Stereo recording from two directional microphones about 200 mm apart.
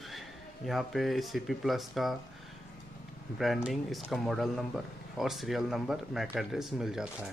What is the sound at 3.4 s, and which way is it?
Speech, 5° right (ahead or behind).